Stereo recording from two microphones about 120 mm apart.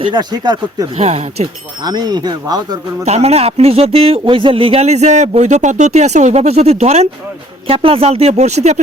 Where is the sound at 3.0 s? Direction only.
60° right (ahead or behind).